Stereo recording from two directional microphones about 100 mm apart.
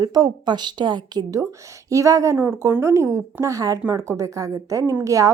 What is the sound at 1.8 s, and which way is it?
A woman's voice, 30° right (ahead or behind).